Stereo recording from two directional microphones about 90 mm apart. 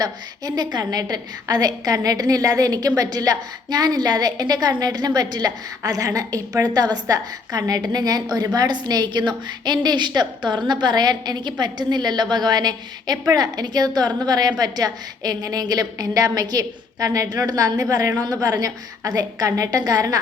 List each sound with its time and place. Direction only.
0.0 s a woman's voice: 45° right (ahead or behind)